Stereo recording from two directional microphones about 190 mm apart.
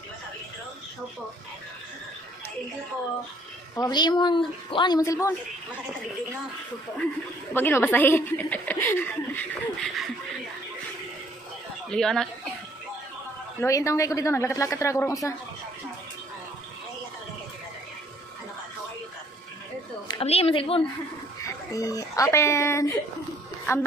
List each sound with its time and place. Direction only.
3.7 s speech: 20° left (ahead or behind)
7.5 s speech: 10° left (ahead or behind)
11.9 s speech: 5° left (ahead or behind)
13.6 s speech: 15° left (ahead or behind)
20.1 s speech: 30° left (ahead or behind)
21.4 s speech: 15° left (ahead or behind)